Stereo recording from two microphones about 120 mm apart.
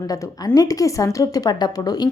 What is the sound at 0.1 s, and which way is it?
A woman's voice, 30° left (ahead or behind).